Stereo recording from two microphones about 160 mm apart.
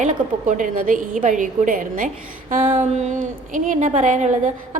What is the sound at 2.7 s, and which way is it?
A woman's voice, 45° right (ahead or behind).